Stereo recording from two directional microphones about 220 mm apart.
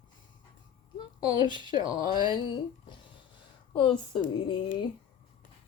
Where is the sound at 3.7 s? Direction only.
20° left (ahead or behind).